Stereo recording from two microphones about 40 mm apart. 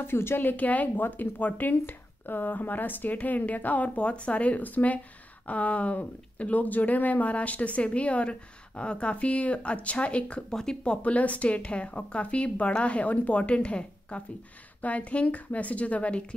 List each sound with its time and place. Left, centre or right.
0.0 s speech: left
0.4 s speech: left
1.0 s speech: left
10.5 s speech: centre
10.8 s speech: left